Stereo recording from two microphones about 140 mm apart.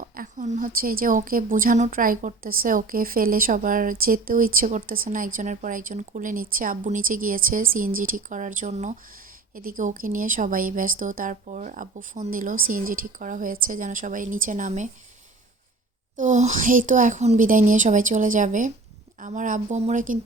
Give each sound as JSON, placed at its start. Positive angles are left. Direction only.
{"t": 0.0, "sound": "a woman's voice", "side_deg": -70}
{"t": 9.6, "sound": "a woman's voice", "side_deg": -80}
{"t": 16.1, "sound": "a woman's voice", "side_deg": -60}